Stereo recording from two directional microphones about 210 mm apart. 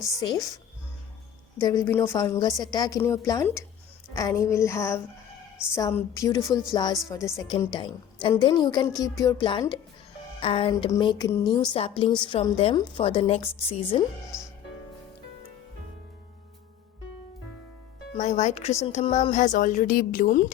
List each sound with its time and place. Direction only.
0.2 s speech: 15° left (ahead or behind)
1.5 s a woman's voice: 15° left (ahead or behind)
18.2 s a woman's voice: 35° left (ahead or behind)